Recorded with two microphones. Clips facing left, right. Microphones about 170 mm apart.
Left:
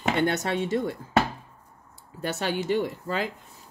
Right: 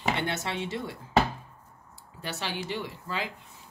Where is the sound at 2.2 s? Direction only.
50° left (ahead or behind).